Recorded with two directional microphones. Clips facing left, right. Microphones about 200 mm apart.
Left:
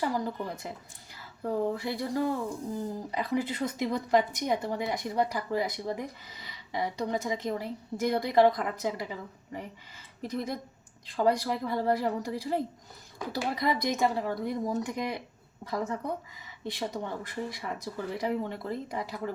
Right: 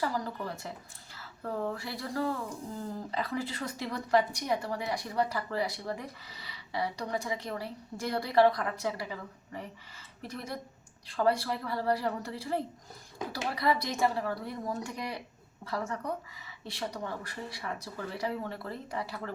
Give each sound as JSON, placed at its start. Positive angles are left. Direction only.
{"t": 0.0, "sound": "a woman's voice", "side_deg": 20}